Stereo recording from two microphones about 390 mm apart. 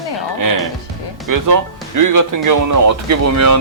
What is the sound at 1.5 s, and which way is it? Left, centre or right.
Speech, right.